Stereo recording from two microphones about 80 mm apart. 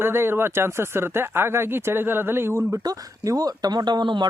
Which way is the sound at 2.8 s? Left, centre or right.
Right.